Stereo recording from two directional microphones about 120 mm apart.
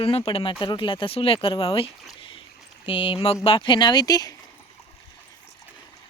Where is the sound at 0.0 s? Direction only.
50° left (ahead or behind); by 4.4 s 30° left (ahead or behind).